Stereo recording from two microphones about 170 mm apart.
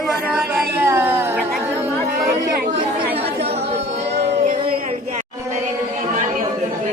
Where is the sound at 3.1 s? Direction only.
35° right (ahead or behind).